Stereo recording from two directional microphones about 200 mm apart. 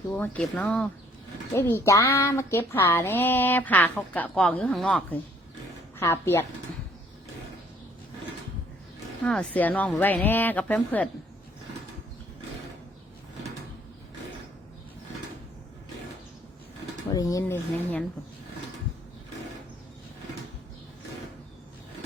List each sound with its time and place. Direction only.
0.1 s speech: 5° left (ahead or behind)
9.2 s speech: 5° left (ahead or behind)
17.1 s speech: 15° left (ahead or behind)